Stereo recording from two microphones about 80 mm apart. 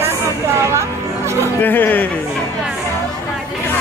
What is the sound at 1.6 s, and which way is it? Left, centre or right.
Speech, left.